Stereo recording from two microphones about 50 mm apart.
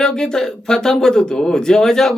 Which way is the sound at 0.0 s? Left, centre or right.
Centre.